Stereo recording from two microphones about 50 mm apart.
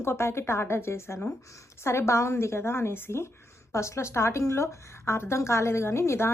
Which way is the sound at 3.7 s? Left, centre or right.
Left.